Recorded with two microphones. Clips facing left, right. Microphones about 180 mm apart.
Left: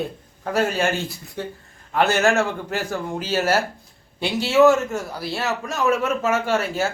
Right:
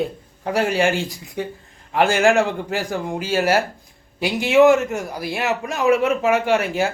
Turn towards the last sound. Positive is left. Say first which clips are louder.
# right 3 dB
turn(degrees=-15)  # may be behind; listen again after turning